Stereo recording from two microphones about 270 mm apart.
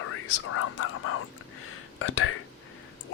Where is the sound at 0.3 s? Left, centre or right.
Left.